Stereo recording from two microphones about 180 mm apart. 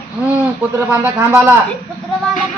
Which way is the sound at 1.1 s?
10° right (ahead or behind).